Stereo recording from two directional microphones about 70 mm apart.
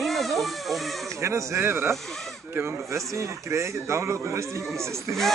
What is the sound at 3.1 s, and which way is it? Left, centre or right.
A man's voice, right.